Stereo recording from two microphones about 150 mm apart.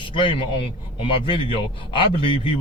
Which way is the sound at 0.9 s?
35° left (ahead or behind).